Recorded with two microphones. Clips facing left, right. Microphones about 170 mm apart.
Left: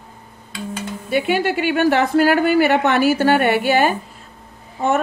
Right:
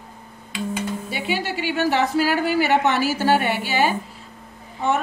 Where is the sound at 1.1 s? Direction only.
55° left (ahead or behind).